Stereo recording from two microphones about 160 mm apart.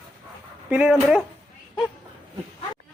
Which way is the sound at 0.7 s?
5° right (ahead or behind).